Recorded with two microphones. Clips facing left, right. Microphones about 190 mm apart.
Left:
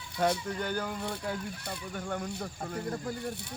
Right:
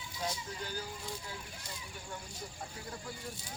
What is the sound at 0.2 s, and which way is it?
Speech, 65° left (ahead or behind).